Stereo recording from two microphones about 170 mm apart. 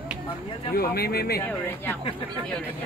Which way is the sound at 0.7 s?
65° left (ahead or behind).